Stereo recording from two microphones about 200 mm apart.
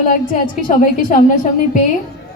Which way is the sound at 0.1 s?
40° left (ahead or behind).